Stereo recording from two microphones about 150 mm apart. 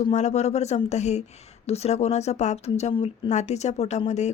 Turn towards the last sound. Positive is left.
turn(degrees=50)  # may be behind; listen again after turning